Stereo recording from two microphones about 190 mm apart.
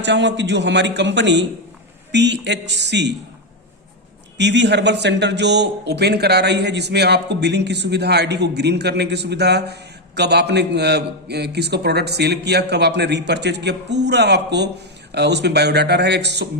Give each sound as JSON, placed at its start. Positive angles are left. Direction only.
{"t": 0.0, "sound": "a man's voice", "side_deg": -70}
{"t": 4.4, "sound": "a man's voice", "side_deg": -65}